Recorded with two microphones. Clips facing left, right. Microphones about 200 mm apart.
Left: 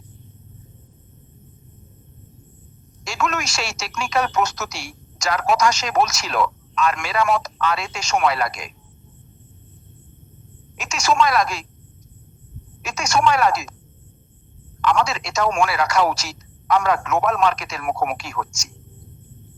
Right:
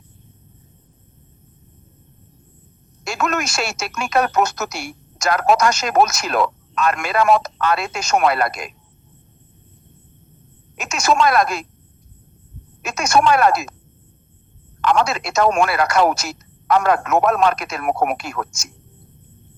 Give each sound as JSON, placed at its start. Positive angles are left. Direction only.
{"t": 3.0, "sound": "speech", "side_deg": -55}
{"t": 10.8, "sound": "speech", "side_deg": -55}
{"t": 12.8, "sound": "a woman's voice", "side_deg": -55}
{"t": 15.0, "sound": "speech", "side_deg": -55}